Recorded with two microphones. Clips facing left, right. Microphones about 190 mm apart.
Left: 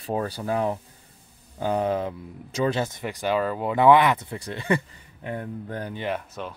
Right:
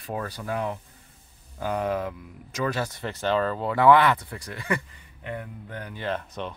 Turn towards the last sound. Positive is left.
turn(degrees=5)  # may be behind; listen again after turning